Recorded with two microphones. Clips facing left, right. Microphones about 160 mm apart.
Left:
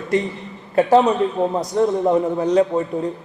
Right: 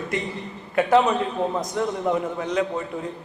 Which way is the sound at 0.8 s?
35° left (ahead or behind).